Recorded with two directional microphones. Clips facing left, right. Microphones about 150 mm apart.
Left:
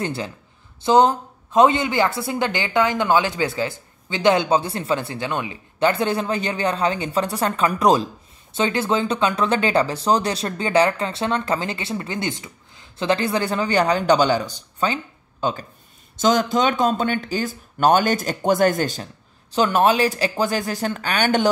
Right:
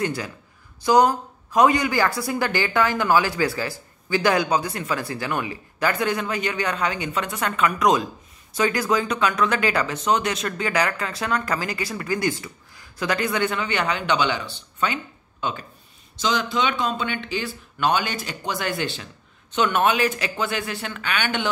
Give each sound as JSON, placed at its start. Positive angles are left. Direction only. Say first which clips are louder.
{"t": 0.0, "sound": "speech", "louder": "even", "side_deg": 30}